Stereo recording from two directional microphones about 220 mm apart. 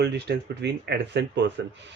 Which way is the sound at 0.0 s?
50° right (ahead or behind).